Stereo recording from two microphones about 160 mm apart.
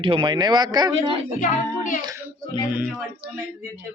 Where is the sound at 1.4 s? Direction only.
55° left (ahead or behind).